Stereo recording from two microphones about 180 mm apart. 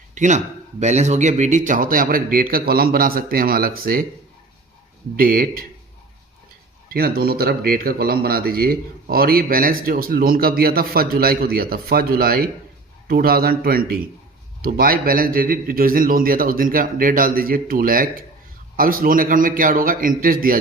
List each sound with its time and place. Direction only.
0.1 s speech: 40° right (ahead or behind)
5.1 s speech: 55° right (ahead or behind)
6.9 s speech: 60° right (ahead or behind)